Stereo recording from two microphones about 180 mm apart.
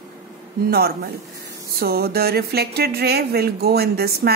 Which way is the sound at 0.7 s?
60° right (ahead or behind).